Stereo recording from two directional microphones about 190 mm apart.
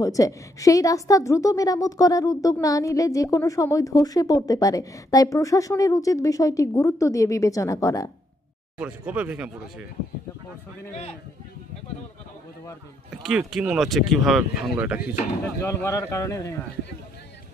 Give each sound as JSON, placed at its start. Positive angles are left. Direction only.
{"t": 0.0, "sound": "a woman's voice", "side_deg": 15}
{"t": 8.7, "sound": "speech", "side_deg": -5}
{"t": 13.2, "sound": "speech", "side_deg": -5}
{"t": 15.0, "sound": "speech", "side_deg": 40}
{"t": 15.6, "sound": "a woman's voice", "side_deg": 15}